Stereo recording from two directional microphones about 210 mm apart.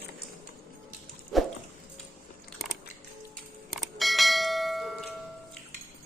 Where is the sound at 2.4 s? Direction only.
Centre (ahead or behind).